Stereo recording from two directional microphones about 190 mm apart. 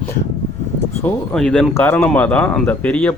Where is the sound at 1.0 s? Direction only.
5° left (ahead or behind).